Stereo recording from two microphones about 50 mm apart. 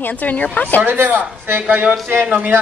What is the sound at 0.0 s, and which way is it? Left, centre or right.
Speech, left.